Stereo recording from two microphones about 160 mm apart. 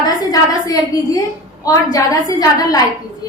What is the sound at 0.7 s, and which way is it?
A woman's voice, 20° left (ahead or behind).